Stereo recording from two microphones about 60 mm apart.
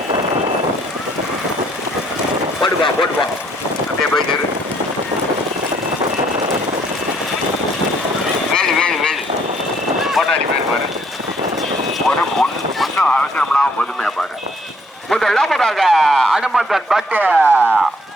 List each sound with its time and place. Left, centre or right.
8.5 s goose: centre
10.0 s a sound: centre
12.0 s clip-clop: centre
13.1 s a sound: centre
15.1 s speech: centre
17.1 s speech: right